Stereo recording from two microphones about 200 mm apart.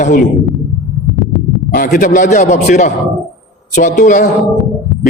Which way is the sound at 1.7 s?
40° left (ahead or behind).